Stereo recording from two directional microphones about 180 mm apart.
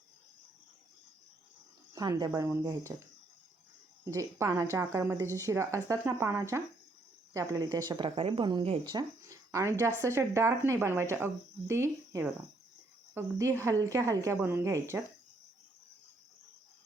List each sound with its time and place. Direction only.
1.9 s speech: 20° right (ahead or behind)
4.0 s speech: 15° right (ahead or behind)